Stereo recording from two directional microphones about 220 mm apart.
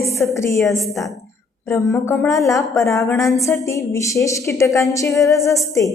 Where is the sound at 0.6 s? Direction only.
Centre (ahead or behind).